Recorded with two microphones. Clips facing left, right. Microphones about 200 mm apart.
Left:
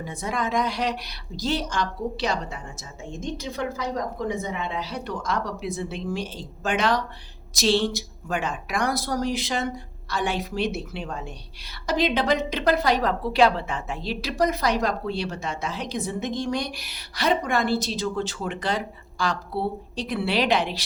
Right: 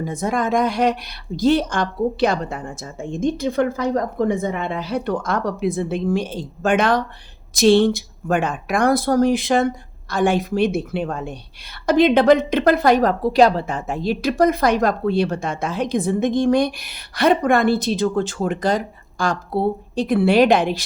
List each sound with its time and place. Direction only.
0.0 s a woman's voice: 45° right (ahead or behind)